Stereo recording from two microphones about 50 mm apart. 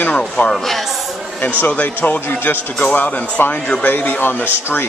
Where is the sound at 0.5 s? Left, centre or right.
Centre.